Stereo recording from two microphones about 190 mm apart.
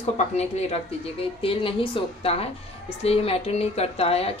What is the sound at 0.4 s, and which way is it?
A woman's voice, 35° left (ahead or behind).